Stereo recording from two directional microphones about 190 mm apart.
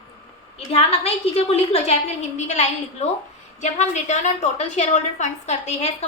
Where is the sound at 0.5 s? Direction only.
30° left (ahead or behind).